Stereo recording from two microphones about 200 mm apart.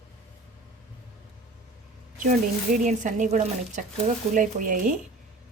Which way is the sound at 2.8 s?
40° right (ahead or behind).